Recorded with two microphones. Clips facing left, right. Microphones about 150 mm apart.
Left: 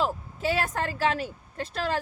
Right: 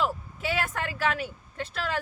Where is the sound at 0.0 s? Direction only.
35° left (ahead or behind).